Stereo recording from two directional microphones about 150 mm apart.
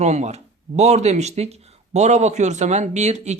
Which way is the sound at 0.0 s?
50° right (ahead or behind).